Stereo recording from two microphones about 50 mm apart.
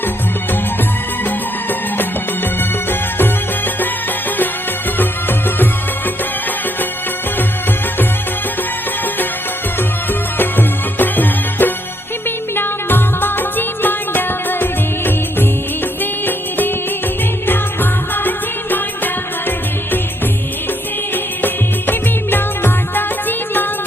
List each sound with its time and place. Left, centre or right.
10.3 s music: left
18.1 s music: left
21.4 s music: left